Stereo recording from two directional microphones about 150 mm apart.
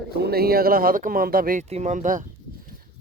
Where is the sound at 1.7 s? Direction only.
50° right (ahead or behind).